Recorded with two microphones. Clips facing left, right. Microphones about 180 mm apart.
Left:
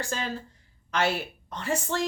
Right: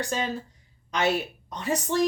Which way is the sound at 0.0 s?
15° right (ahead or behind).